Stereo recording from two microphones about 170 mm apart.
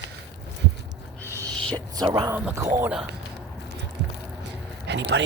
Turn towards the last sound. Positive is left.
turn(degrees=-90)